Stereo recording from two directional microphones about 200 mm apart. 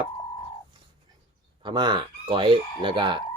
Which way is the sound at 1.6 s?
20° right (ahead or behind).